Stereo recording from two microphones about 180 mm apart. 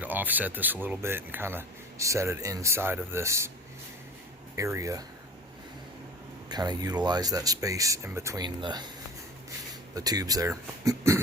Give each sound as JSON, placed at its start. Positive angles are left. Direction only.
{"t": 0.0, "sound": "speech", "side_deg": -10}
{"t": 4.5, "sound": "speech", "side_deg": -15}
{"t": 6.5, "sound": "speech", "side_deg": -20}
{"t": 9.9, "sound": "speech", "side_deg": -20}